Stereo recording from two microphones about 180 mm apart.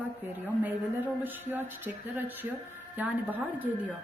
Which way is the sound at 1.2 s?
10° right (ahead or behind).